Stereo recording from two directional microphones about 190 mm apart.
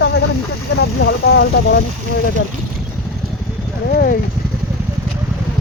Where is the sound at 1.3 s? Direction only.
60° left (ahead or behind).